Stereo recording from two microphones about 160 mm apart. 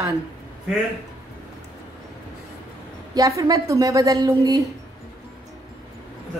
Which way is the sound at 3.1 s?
20° right (ahead or behind).